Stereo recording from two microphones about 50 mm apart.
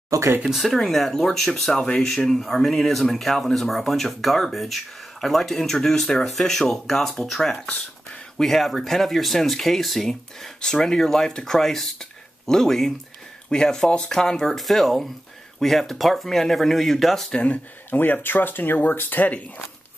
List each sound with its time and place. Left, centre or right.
0.1 s speech: right
0.7 s speech: centre
7.6 s a sound: left
8.4 s speech: centre
17.3 s speech: left
17.9 s speech: left